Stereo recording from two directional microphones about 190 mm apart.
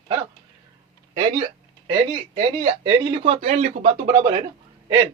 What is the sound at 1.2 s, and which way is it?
Speech, 25° right (ahead or behind).